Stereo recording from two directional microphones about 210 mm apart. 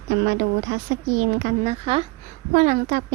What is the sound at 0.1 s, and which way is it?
Speech, 50° right (ahead or behind).